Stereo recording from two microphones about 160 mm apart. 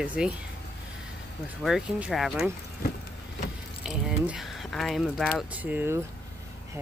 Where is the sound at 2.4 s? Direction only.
60° left (ahead or behind).